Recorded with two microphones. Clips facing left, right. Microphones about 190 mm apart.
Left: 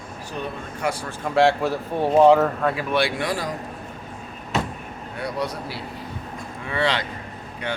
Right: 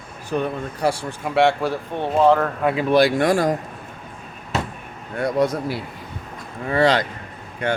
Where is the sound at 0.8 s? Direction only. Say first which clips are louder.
Right 5 dB; 35° right (ahead or behind).